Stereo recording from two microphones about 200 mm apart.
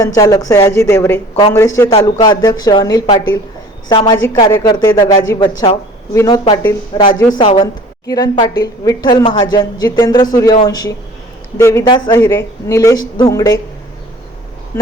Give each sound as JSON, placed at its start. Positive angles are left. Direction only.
{"t": 0.0, "sound": "a man's voice", "side_deg": 15}